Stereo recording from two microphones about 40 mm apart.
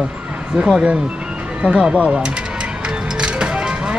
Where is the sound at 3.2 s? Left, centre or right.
Right.